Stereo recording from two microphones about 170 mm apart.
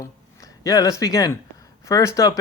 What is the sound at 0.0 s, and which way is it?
Speech, 20° left (ahead or behind).